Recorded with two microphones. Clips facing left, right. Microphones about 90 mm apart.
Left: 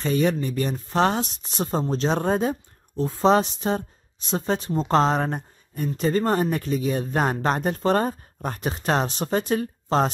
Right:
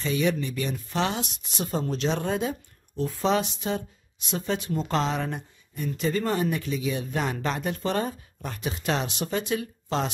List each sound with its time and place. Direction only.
0.0 s speech: 40° left (ahead or behind)